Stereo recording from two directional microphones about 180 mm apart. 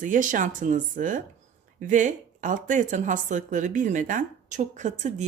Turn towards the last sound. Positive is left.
turn(degrees=-40)  # may be behind; listen again after turning